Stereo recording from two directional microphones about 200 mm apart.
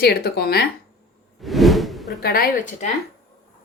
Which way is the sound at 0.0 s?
50° left (ahead or behind).